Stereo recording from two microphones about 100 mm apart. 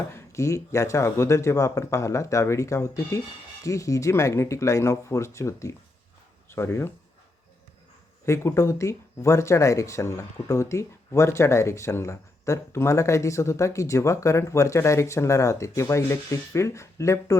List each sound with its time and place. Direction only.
0.1 s speech: 30° left (ahead or behind)
8.2 s speech: 30° left (ahead or behind)